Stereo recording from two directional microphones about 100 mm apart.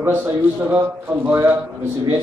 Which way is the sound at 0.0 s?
15° right (ahead or behind).